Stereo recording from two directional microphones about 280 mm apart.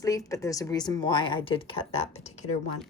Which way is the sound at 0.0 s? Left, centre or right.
Centre.